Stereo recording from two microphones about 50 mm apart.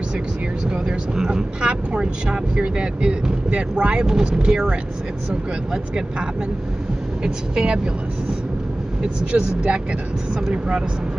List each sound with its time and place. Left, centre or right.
0.7 s speech: centre
7.2 s speech: centre
9.0 s speech: right